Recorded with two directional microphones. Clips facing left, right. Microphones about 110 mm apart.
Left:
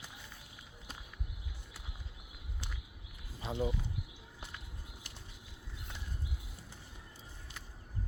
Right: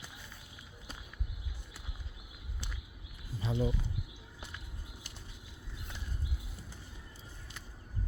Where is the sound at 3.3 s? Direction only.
50° left (ahead or behind).